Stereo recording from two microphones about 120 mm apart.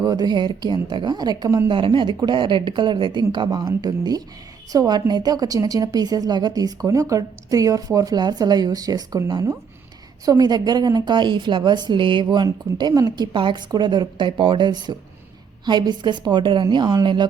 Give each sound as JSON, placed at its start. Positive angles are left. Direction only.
{"t": 0.0, "sound": "a woman's voice", "side_deg": -35}
{"t": 1.7, "sound": "a woman's voice", "side_deg": -45}